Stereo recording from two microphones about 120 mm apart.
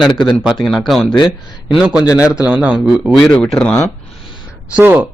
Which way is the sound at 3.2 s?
10° left (ahead or behind).